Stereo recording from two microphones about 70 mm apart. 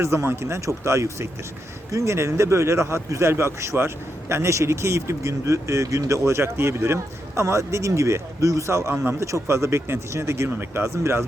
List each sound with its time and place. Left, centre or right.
0.0 s speech: right